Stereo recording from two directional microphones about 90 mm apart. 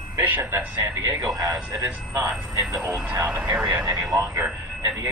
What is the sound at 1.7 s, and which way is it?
A man's voice, 35° right (ahead or behind).